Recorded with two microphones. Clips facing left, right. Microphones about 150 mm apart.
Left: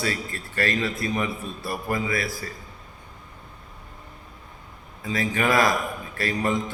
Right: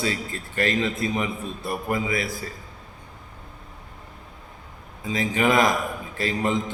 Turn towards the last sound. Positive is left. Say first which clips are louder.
# right 1 dB
turn(degrees=-20)  # may be behind; listen again after turning